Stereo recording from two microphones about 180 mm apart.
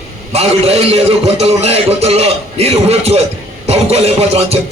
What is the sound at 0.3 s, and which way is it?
A man's voice, 35° right (ahead or behind).